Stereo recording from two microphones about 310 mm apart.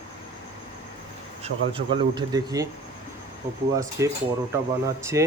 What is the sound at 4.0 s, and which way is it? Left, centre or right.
Speech, centre.